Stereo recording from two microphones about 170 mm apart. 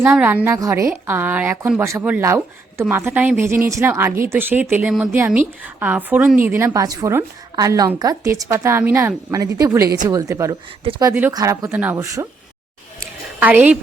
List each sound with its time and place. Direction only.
0.0 s a woman's voice: 10° right (ahead or behind)
13.4 s a woman's voice: 10° right (ahead or behind)